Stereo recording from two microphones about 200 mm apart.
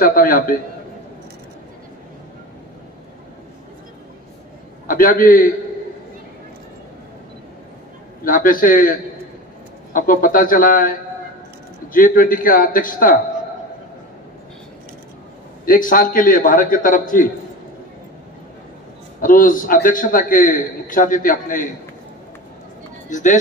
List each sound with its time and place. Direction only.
0.0 s a man's voice: 45° left (ahead or behind)
4.8 s a man's voice: 45° left (ahead or behind)
8.2 s a man's voice: 45° left (ahead or behind)
9.9 s a man's voice: 45° left (ahead or behind)
15.6 s a man's voice: 45° left (ahead or behind)
19.2 s a man's voice: 45° left (ahead or behind)
23.0 s speech: 40° left (ahead or behind)